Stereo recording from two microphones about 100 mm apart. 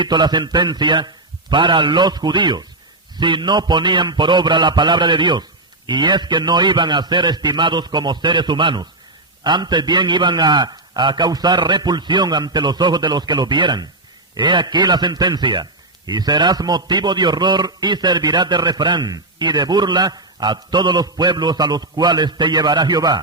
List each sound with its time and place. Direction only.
0.0 s a man's voice: 45° right (ahead or behind)